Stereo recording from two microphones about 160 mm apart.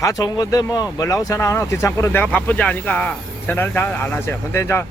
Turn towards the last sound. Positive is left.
turn(degrees=15)  # may be behind; listen again after turning